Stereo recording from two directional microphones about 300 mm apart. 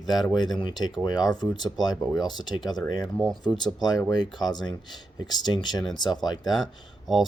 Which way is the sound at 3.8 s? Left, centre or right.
Centre.